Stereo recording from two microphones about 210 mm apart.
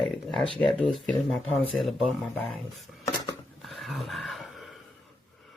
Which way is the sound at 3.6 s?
Centre (ahead or behind).